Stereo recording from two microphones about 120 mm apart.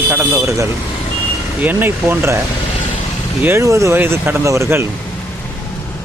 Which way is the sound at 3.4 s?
20° right (ahead or behind).